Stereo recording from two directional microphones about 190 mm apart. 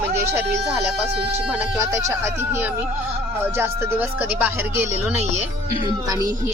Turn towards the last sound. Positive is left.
turn(degrees=-20)  # may be behind; listen again after turning